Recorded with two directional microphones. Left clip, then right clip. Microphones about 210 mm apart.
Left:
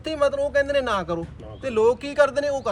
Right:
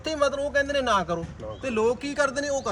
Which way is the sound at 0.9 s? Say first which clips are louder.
Right 1 dB; 10° left (ahead or behind).